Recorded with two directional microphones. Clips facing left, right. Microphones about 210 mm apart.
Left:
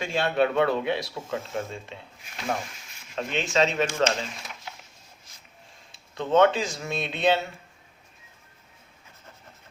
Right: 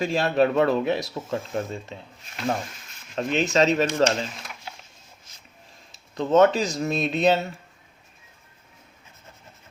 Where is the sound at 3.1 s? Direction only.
40° right (ahead or behind).